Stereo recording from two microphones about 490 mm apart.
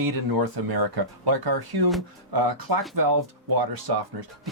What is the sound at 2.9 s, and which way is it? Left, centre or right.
Speech, right.